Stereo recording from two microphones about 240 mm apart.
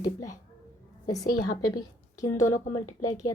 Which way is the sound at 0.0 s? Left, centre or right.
Centre.